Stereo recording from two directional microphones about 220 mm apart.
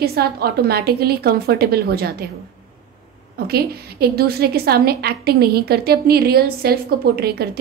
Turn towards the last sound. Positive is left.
turn(degrees=-45)  # may be behind; listen again after turning